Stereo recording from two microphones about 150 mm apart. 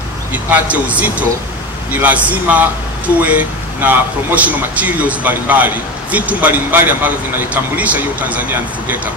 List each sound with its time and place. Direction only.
0.3 s speech: 10° right (ahead or behind)